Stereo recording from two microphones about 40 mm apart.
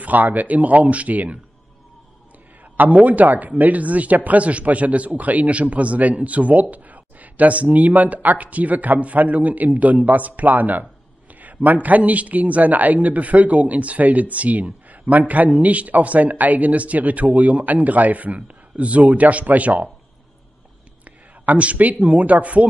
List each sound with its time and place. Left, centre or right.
0.0 s speech: right
2.8 s speech: right
21.0 s speech: right